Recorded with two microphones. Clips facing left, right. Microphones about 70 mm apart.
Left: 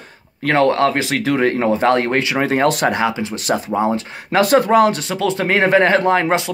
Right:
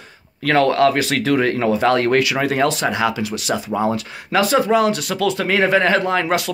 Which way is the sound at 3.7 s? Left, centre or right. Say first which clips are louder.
Left 2 dB; left.